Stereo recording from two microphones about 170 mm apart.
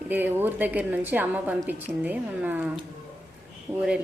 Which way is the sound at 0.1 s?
10° right (ahead or behind).